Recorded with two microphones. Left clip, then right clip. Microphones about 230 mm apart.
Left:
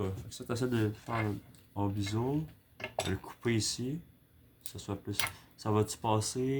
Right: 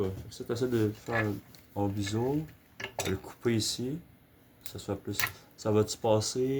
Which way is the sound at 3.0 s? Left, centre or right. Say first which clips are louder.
Right 1 dB; left.